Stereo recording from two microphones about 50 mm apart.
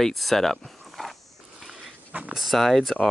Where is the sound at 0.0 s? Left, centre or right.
Centre.